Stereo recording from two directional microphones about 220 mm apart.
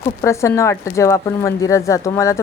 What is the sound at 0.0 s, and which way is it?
Speech, 15° left (ahead or behind).